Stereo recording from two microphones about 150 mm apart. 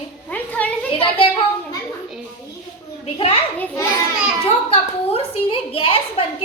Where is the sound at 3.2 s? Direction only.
40° left (ahead or behind).